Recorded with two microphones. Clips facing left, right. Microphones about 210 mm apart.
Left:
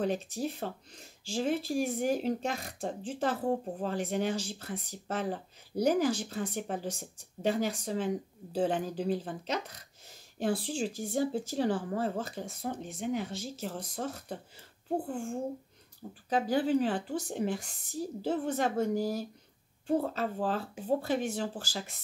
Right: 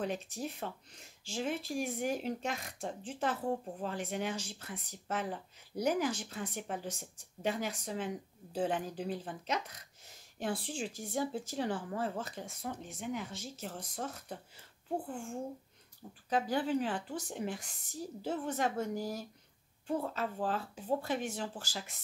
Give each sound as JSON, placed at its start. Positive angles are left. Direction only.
{"t": 0.0, "sound": "speech", "side_deg": 35}
{"t": 16.3, "sound": "speech", "side_deg": 35}